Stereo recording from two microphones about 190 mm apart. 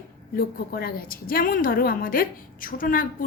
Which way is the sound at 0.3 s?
50° left (ahead or behind).